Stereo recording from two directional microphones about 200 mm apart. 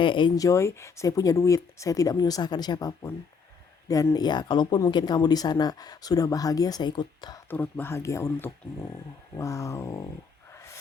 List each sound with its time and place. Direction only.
0.0 s speech: 25° left (ahead or behind)
7.5 s speech: 10° left (ahead or behind)